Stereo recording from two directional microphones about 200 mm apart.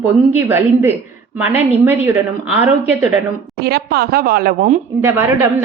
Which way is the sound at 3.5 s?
55° right (ahead or behind).